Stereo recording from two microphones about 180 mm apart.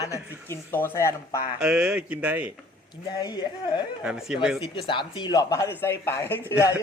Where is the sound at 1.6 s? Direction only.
5° right (ahead or behind).